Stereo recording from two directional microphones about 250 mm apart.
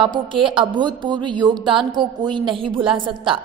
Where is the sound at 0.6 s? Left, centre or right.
Centre.